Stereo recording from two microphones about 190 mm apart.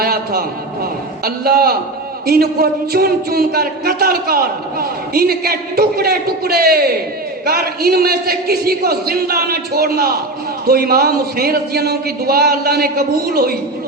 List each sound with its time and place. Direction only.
0.0 s a man's voice: 55° right (ahead or behind)